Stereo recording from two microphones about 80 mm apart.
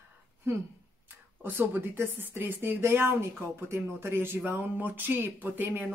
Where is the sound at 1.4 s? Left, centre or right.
Right.